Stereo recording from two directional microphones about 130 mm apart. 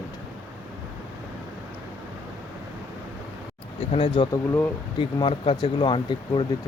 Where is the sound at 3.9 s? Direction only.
40° left (ahead or behind).